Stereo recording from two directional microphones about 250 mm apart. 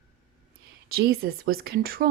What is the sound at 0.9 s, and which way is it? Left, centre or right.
Speech, right.